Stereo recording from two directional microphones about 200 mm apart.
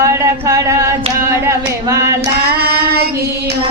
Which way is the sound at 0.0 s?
15° right (ahead or behind).